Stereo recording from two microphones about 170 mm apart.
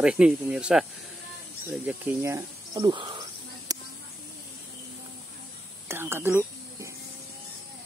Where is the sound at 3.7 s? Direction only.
20° right (ahead or behind).